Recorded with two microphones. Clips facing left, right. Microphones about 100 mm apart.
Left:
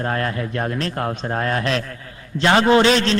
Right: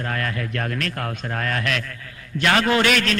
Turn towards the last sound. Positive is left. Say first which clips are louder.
# left 5 dB
turn(degrees=25)  # may be behind; listen again after turning